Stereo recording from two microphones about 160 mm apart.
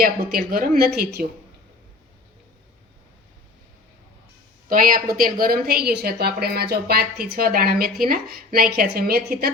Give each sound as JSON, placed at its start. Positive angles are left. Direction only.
{"t": 0.0, "sound": "a woman's voice", "side_deg": -65}
{"t": 4.7, "sound": "a woman's voice", "side_deg": -60}